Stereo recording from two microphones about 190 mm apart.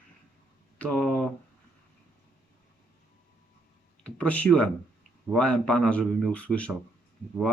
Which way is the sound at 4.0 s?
5° left (ahead or behind).